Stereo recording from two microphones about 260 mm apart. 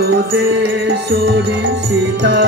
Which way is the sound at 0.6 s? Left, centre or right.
Right.